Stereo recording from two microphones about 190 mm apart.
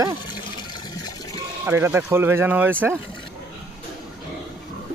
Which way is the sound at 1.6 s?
10° right (ahead or behind).